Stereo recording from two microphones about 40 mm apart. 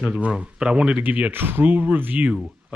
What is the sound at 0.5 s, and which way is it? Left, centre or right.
Speech, centre.